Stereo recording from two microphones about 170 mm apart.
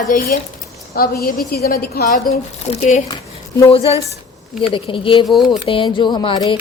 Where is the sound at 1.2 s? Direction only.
60° left (ahead or behind); by 3.0 s 40° left (ahead or behind).